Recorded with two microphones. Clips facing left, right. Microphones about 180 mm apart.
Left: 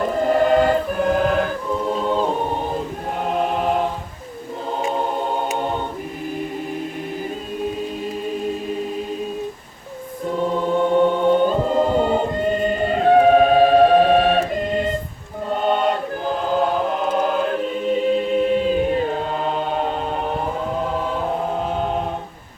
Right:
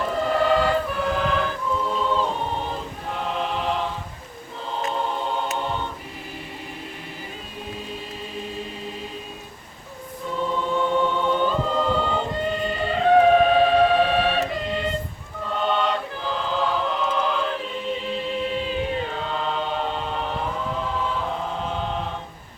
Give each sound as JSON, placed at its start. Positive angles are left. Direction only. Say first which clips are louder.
{"t": 0.2, "sound": "choir", "louder": "left 5 dB", "side_deg": 45}
{"t": 3.2, "sound": "chant", "louder": "left 6 dB", "side_deg": 45}
{"t": 4.9, "sound": "music", "louder": "left 4 dB", "side_deg": 45}
{"t": 5.5, "sound": "choir", "louder": "left 4 dB", "side_deg": 45}
{"t": 10.2, "sound": "choir", "louder": "left 5 dB", "side_deg": 45}
{"t": 15.4, "sound": "chant", "louder": "left 4 dB", "side_deg": 45}